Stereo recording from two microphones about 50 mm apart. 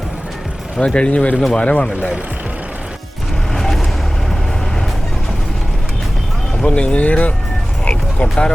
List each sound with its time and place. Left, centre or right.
0.8 s speech: left
3.5 s vehicle: centre
6.6 s speech: left
7.9 s music: left